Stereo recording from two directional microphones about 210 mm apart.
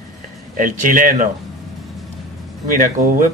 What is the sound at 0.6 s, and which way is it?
Speech, 40° right (ahead or behind).